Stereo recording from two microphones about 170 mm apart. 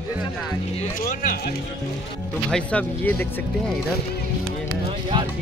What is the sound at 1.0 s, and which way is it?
Speech, 60° left (ahead or behind).